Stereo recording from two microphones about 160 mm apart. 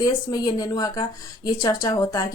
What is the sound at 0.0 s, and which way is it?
A woman's voice, 25° left (ahead or behind).